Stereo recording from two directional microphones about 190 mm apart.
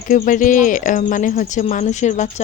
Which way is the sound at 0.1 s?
45° left (ahead or behind).